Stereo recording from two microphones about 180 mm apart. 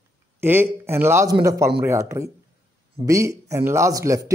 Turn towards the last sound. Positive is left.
turn(degrees=-20)  # may be behind; listen again after turning